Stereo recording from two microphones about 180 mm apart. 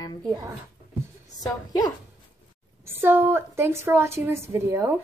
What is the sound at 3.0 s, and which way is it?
A woman's voice, 15° right (ahead or behind).